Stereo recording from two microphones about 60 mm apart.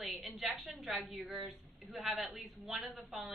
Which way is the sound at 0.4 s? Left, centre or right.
Centre.